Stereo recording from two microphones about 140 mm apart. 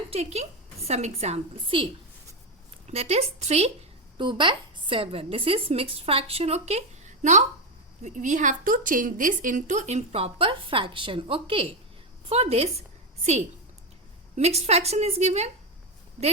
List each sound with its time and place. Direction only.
0.1 s a woman's voice: 50° right (ahead or behind)
2.9 s a woman's voice: 50° right (ahead or behind)
4.2 s a woman's voice: 35° right (ahead or behind)
14.3 s a woman's voice: 50° right (ahead or behind)